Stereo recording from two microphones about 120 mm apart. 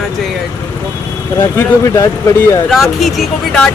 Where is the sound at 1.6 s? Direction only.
25° left (ahead or behind).